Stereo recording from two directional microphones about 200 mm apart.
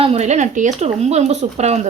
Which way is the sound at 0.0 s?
30° right (ahead or behind).